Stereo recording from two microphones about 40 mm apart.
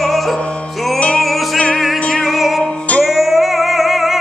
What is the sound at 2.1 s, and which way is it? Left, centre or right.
Music, centre.